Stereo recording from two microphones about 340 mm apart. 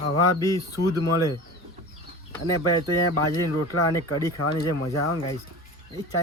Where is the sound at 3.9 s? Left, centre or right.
Centre.